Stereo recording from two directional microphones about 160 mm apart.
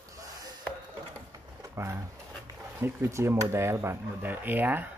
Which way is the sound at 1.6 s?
20° right (ahead or behind).